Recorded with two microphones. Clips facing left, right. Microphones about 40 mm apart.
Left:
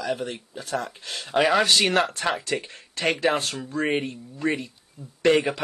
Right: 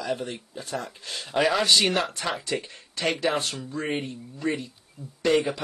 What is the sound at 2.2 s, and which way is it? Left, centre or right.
Speech, left.